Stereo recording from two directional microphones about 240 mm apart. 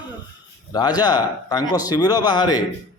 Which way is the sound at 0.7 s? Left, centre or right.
Centre.